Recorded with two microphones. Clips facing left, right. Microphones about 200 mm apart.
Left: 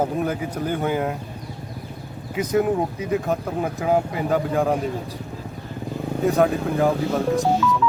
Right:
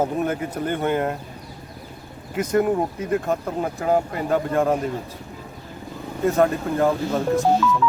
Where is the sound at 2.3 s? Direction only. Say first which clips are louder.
Even; centre (ahead or behind).